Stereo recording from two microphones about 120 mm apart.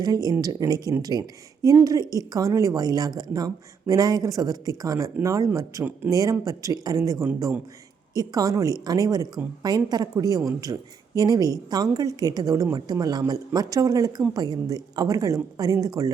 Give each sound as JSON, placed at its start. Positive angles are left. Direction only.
{"t": 0.0, "sound": "a woman's voice", "side_deg": -30}